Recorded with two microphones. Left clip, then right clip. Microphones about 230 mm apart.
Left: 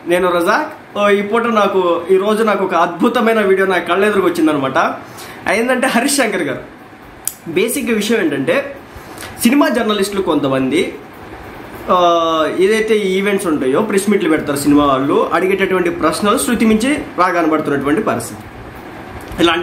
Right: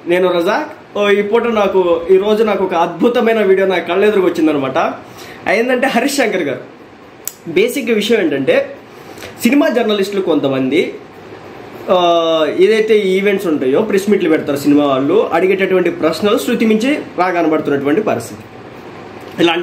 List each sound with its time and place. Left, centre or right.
0.1 s speech: centre
7.7 s speech: centre
11.9 s speech: centre
19.3 s speech: centre